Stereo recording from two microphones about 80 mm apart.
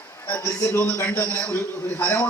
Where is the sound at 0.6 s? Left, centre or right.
Left.